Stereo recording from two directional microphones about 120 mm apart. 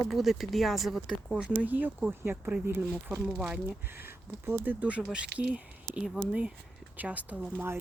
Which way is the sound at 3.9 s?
20° right (ahead or behind).